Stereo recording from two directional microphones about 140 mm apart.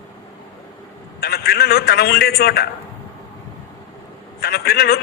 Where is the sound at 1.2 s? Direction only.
90° left.